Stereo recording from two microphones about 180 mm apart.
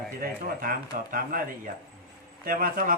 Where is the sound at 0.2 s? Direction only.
55° right (ahead or behind).